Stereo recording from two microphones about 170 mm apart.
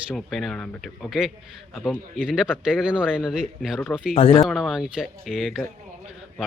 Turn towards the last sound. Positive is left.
turn(degrees=0)  # may be behind; listen again after turning